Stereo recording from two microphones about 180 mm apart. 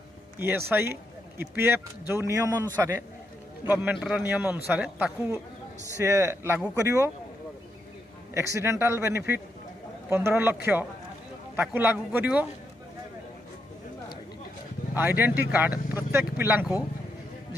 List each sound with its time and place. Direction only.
0.4 s a man's voice: 10° right (ahead or behind)
8.5 s a man's voice: 15° right (ahead or behind)
15.0 s a man's voice: 10° right (ahead or behind)